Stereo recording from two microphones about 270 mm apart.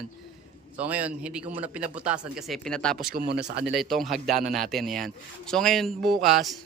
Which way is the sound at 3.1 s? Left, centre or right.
Right.